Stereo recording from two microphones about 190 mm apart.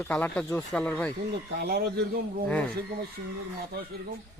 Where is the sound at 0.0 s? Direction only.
10° left (ahead or behind).